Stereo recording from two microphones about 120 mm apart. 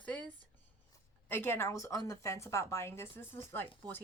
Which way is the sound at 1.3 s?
20° left (ahead or behind).